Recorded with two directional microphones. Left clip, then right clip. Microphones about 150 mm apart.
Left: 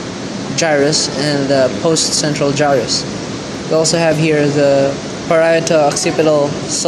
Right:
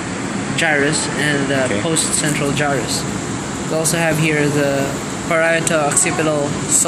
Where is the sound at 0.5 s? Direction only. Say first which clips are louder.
Left 3 dB; 40° left (ahead or behind).